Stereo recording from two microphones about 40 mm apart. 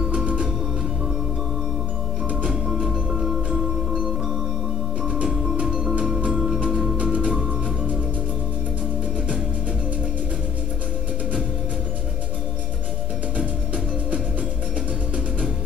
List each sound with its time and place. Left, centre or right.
0.0 s music: right
2.7 s music: centre
3.1 s music: centre
5.7 s music: centre
6.2 s a sound: right
6.7 s music: centre
7.0 s music: right